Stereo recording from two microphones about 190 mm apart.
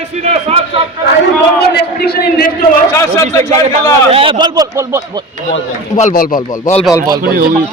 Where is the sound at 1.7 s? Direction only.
55° left (ahead or behind).